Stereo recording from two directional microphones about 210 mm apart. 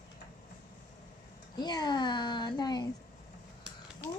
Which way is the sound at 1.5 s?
20° left (ahead or behind).